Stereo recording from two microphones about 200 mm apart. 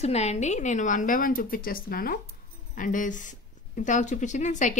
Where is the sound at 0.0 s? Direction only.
35° left (ahead or behind).